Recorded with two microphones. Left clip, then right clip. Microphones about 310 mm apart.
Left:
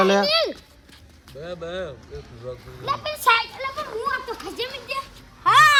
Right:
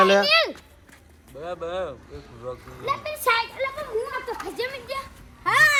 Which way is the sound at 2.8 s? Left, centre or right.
Centre.